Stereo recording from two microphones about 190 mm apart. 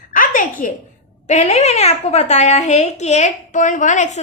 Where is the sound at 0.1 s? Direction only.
45° left (ahead or behind).